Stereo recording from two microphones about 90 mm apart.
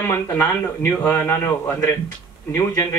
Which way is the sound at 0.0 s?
25° left (ahead or behind).